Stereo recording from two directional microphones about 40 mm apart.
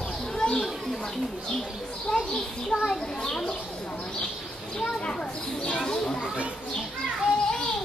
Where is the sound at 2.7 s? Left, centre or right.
Centre.